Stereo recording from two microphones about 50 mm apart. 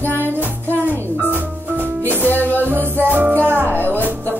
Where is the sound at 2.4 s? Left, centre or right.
Left.